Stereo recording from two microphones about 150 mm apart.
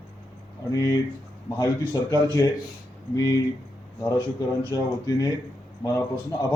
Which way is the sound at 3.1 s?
25° left (ahead or behind).